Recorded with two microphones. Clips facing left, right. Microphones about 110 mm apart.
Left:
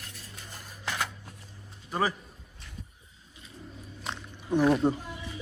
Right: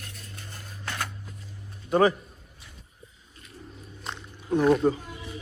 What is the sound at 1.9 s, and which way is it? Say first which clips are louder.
Speech: right 8 dB; centre (ahead or behind).